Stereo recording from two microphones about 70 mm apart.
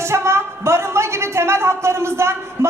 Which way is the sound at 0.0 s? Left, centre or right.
Right.